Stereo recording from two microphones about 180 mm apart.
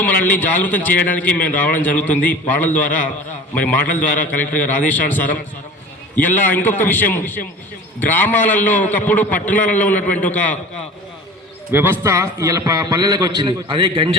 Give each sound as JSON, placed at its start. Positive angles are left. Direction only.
{"t": 0.0, "sound": "a man's voice", "side_deg": 10}
{"t": 11.7, "sound": "a man's voice", "side_deg": -10}